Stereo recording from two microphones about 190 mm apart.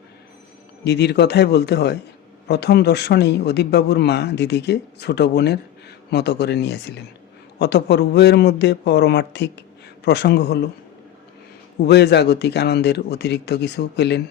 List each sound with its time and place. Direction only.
0.9 s a man's voice: 60° left (ahead or behind)
11.9 s a man's voice: 60° left (ahead or behind)